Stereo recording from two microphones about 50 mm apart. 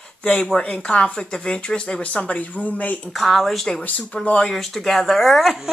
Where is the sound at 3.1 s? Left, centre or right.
Centre.